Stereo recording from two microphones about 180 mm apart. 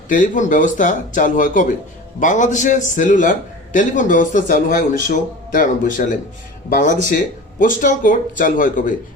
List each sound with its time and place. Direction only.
0.1 s a man's voice: 45° left (ahead or behind)